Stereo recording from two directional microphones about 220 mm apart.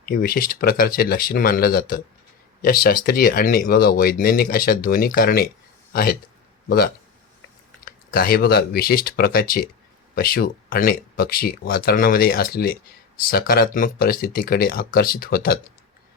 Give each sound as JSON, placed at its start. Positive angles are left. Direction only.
{"t": 0.0, "sound": "speech", "side_deg": 40}